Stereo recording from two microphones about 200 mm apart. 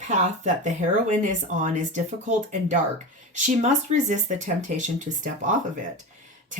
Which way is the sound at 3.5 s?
40° right (ahead or behind).